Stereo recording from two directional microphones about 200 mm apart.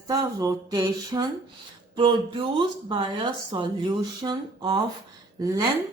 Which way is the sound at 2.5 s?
25° right (ahead or behind).